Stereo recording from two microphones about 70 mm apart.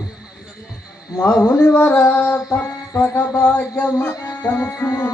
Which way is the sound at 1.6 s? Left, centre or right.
Left.